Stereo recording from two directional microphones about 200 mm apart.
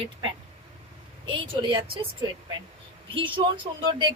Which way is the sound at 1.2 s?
25° right (ahead or behind).